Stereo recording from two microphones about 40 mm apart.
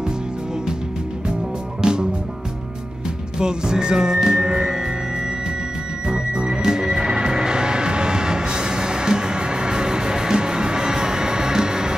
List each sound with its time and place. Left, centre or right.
1.8 s music: centre
3.3 s music: centre
6.0 s music: centre